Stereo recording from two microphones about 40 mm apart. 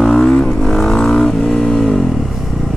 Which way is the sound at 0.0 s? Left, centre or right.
Centre.